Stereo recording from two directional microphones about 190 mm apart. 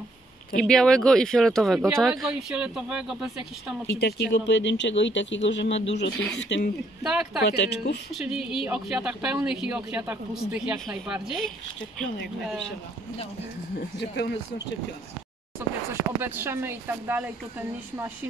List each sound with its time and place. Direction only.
0.6 s speech: 5° left (ahead or behind)
4.0 s speech: 65° left (ahead or behind)
7.0 s speech: 5° right (ahead or behind)
7.4 s speech: 60° left (ahead or behind)
8.1 s speech: centre (ahead or behind)
13.7 s speech: 60° left (ahead or behind)
15.9 s speech: 10° right (ahead or behind)